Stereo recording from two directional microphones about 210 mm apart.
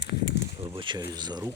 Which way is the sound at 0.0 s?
55° left (ahead or behind).